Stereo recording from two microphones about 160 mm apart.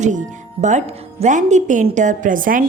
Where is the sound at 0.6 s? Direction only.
45° right (ahead or behind).